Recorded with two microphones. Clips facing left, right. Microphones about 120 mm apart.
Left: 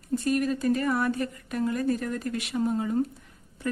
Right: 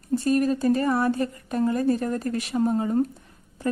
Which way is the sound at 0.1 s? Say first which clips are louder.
Right 4 dB; 35° right (ahead or behind).